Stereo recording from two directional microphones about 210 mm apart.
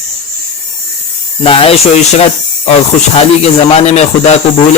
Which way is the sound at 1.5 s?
25° left (ahead or behind).